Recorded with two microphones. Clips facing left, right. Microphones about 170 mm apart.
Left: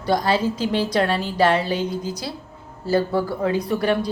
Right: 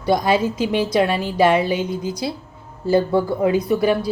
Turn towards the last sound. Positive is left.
turn(degrees=-10)  # may be behind; listen again after turning